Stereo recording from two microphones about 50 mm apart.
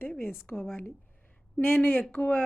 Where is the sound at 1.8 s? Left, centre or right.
Left.